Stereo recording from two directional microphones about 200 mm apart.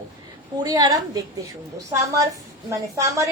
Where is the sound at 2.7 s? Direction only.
15° right (ahead or behind).